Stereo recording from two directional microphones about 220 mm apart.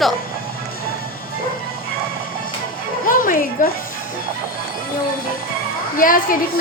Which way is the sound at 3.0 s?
40° left (ahead or behind).